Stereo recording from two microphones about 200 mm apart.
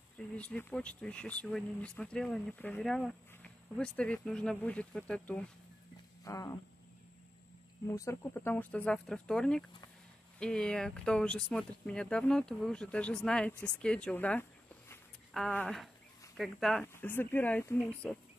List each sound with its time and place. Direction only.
0.4 s speech: 5° left (ahead or behind)
6.2 s speech: 15° left (ahead or behind)
7.9 s speech: 15° left (ahead or behind)